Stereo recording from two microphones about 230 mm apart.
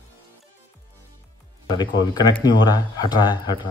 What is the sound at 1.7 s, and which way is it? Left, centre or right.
Speech, centre.